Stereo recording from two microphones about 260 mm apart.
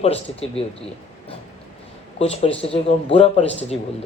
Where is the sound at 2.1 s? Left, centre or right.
Left.